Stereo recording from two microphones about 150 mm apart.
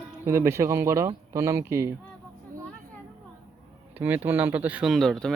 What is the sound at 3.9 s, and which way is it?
Speech, 10° right (ahead or behind).